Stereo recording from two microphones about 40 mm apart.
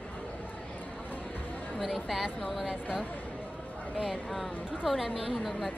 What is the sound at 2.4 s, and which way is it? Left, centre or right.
Speech, centre.